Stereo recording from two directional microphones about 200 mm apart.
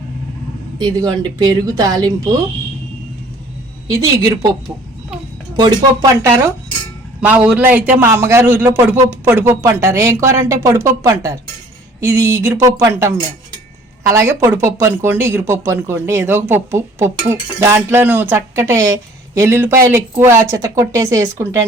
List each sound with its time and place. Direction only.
0.8 s speech: 20° right (ahead or behind)
3.8 s speech: 15° right (ahead or behind)
5.5 s speech: 20° right (ahead or behind)
7.2 s speech: 5° right (ahead or behind)